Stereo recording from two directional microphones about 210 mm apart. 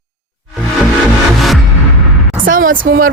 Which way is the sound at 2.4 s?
40° right (ahead or behind).